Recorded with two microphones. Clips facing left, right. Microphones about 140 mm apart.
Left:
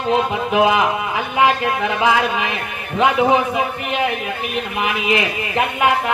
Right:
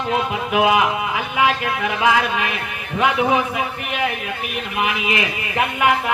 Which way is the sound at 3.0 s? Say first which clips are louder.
Left 3 dB; 25° left (ahead or behind).